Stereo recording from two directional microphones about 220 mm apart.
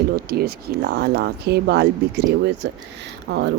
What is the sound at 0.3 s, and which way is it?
Speech, 45° right (ahead or behind).